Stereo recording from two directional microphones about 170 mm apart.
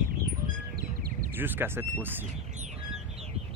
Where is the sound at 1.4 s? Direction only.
10° right (ahead or behind).